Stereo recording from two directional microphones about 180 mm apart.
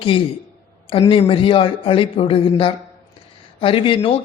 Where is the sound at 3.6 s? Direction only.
30° left (ahead or behind).